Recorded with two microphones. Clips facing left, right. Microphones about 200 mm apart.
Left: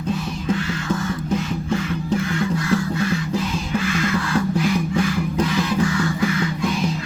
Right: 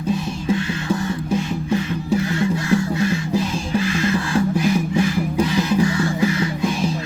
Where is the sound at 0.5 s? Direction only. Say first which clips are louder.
Right 2 dB; 20° right (ahead or behind).